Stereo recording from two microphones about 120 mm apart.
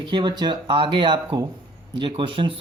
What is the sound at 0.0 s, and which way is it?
Speech, 40° right (ahead or behind).